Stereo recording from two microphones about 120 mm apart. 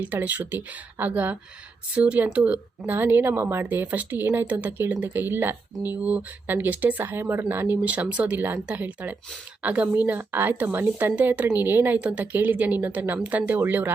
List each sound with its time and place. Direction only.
0.0 s speech: 15° right (ahead or behind)